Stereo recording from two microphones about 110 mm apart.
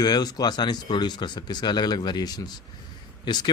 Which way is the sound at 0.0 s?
35° left (ahead or behind).